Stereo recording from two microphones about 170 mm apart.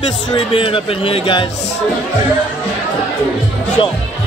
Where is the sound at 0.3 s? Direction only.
30° left (ahead or behind).